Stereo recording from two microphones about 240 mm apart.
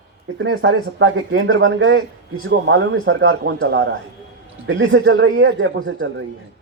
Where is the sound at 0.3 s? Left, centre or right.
Right.